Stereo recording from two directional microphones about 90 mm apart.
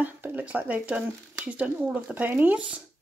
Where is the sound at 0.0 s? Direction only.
20° right (ahead or behind).